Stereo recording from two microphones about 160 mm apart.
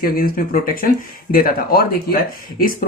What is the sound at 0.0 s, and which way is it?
Speech, 65° left (ahead or behind).